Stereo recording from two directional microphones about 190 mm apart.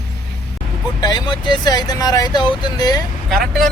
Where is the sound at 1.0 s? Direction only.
20° left (ahead or behind).